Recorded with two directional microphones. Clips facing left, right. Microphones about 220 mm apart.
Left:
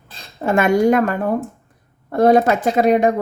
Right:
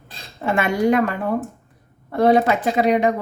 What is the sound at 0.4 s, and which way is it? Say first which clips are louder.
Speech: left 4 dB; 45° left (ahead or behind).